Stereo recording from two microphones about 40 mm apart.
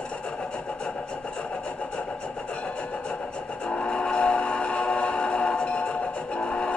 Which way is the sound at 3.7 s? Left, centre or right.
Left.